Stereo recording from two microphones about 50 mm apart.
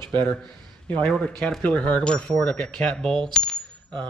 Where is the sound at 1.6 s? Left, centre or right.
Left.